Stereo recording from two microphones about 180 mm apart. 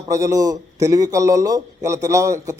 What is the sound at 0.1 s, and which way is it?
Speech, 20° right (ahead or behind).